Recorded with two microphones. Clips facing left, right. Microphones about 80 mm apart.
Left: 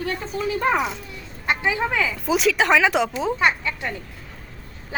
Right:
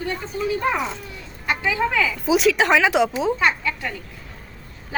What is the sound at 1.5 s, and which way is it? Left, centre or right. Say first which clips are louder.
Speech: even; left.